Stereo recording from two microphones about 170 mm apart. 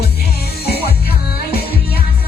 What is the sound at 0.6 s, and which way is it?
Music, 70° left (ahead or behind).